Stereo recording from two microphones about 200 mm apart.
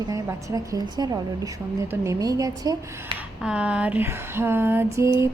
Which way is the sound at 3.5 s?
5° right (ahead or behind).